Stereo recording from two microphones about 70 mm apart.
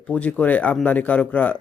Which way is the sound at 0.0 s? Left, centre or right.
Centre.